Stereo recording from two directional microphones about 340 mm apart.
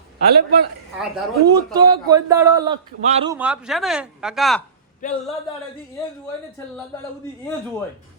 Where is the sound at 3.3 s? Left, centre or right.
Centre.